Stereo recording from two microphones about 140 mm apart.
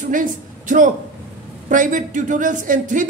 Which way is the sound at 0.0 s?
70° right (ahead or behind).